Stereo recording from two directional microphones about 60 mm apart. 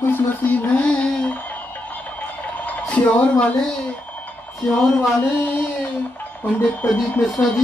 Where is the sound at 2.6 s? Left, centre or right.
Left.